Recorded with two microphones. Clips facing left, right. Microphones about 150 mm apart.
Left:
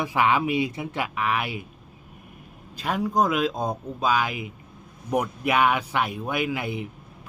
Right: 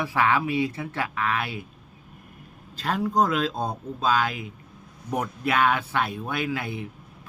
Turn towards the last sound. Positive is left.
turn(degrees=15)  # may be behind; listen again after turning